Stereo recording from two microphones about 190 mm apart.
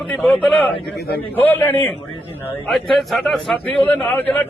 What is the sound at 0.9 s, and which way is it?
Speech, 55° left (ahead or behind).